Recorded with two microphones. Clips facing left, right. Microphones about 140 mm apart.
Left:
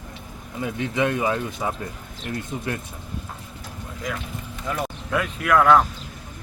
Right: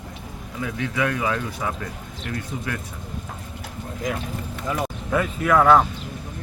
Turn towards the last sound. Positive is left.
turn(degrees=-5)  # may be behind; listen again after turning